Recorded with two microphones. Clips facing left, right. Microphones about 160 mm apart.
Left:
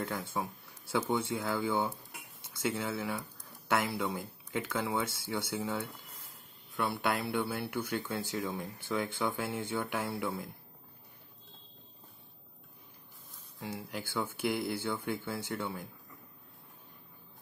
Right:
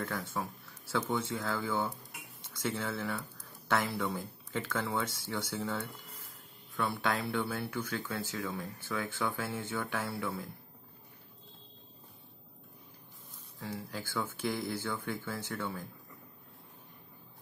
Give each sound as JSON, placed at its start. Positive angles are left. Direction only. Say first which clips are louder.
{"t": 0.0, "sound": "speech", "louder": "left 1 dB", "side_deg": 15}
{"t": 13.6, "sound": "speech", "louder": "even", "side_deg": 15}